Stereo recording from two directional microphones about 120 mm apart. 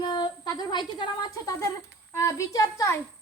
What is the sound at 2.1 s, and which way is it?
Speech, 25° left (ahead or behind).